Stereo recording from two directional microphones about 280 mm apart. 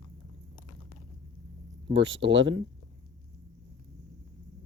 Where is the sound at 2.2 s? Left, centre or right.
Right.